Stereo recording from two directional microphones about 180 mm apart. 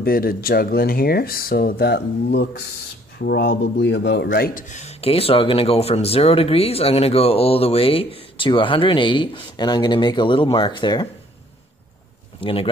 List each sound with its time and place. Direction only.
0.0 s speech: 55° left (ahead or behind); by 4.3 s 75° left (ahead or behind)
4.3 s speech: 50° left (ahead or behind); by 11.1 s 25° left (ahead or behind)
12.4 s speech: 30° left (ahead or behind)